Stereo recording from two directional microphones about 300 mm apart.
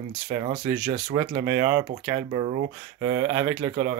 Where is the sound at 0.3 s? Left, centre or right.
Centre.